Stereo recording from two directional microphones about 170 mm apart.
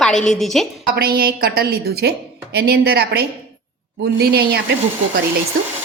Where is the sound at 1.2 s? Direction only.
60° right (ahead or behind).